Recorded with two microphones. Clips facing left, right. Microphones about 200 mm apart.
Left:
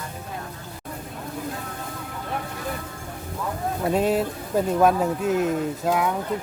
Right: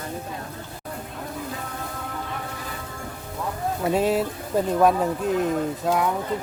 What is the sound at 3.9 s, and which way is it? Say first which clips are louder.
Speech: even; centre (ahead or behind).